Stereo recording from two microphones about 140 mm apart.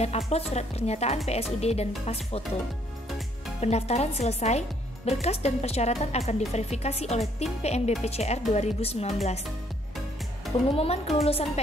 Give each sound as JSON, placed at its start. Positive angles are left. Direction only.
{"t": 0.3, "sound": "a woman's voice", "side_deg": 50}
{"t": 3.6, "sound": "a woman's voice", "side_deg": 50}
{"t": 10.8, "sound": "a woman's voice", "side_deg": 45}